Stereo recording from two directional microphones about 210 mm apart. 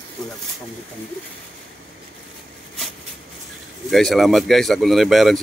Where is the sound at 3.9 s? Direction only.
Centre (ahead or behind).